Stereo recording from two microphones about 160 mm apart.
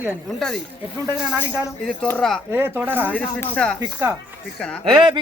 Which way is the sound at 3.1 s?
5° left (ahead or behind).